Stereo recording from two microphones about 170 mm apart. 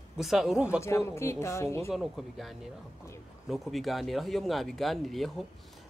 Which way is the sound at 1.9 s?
Centre (ahead or behind).